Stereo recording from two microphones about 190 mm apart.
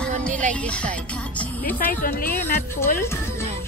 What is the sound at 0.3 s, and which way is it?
Speech, 40° right (ahead or behind).